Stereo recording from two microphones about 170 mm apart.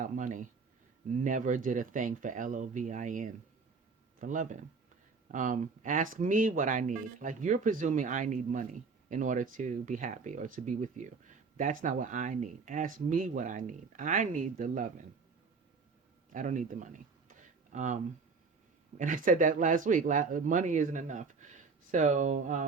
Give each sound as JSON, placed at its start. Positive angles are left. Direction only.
{"t": 0.0, "sound": "speech", "side_deg": -50}
{"t": 16.3, "sound": "a sound", "side_deg": -50}
{"t": 18.9, "sound": "speech", "side_deg": -50}